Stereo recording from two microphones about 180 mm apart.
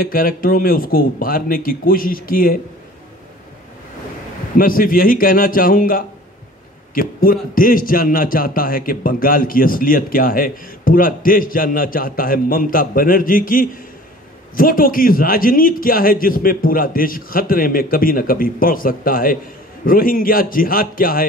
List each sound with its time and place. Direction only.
0.0 s a man's voice: 50° left (ahead or behind)
4.6 s a man's voice: 50° left (ahead or behind)